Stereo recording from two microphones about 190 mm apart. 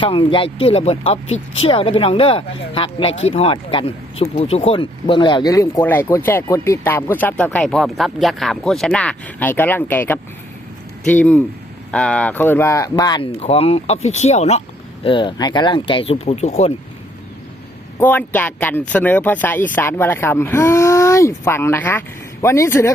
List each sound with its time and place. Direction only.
0.0 s speech: 30° left (ahead or behind)
18.0 s speech: 10° left (ahead or behind)